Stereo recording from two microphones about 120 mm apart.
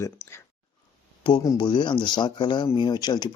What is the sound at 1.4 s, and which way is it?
Speech, 25° left (ahead or behind).